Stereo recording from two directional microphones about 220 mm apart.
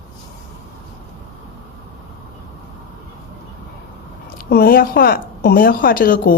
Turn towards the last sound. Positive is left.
turn(degrees=40)  # may be behind; listen again after turning